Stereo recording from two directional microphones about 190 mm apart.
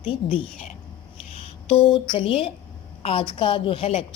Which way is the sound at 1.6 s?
30° left (ahead or behind).